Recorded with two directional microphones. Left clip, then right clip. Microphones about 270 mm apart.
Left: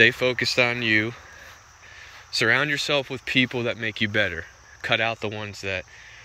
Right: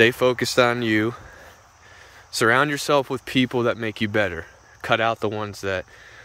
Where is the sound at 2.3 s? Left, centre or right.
Centre.